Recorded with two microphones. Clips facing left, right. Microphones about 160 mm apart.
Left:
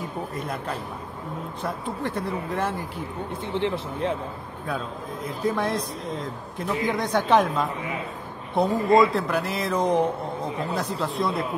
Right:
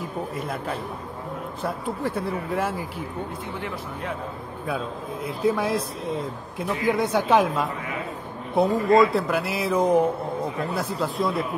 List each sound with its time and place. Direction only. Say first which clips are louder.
0.3 s a man's voice: right 1 dB; 5° right (ahead or behind)
3.4 s speech: left 6 dB; 25° left (ahead or behind)
4.6 s a man's voice: right 2 dB; 5° right (ahead or behind)